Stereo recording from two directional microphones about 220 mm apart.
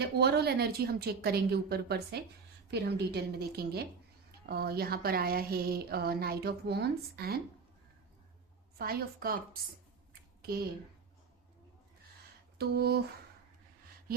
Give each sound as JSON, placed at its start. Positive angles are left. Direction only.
{"t": 0.0, "sound": "a woman's voice", "side_deg": -45}
{"t": 8.8, "sound": "a woman's voice", "side_deg": -40}
{"t": 12.5, "sound": "a woman's voice", "side_deg": -45}